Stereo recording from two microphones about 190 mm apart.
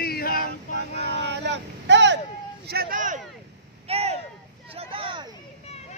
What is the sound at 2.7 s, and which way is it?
Speech, 50° right (ahead or behind).